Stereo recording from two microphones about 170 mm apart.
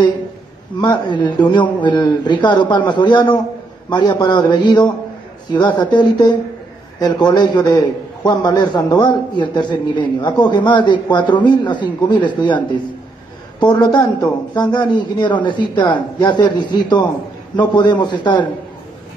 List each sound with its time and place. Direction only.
0.7 s a man's voice: 25° left (ahead or behind)